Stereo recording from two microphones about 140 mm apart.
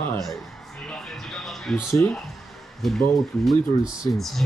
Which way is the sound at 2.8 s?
Centre (ahead or behind).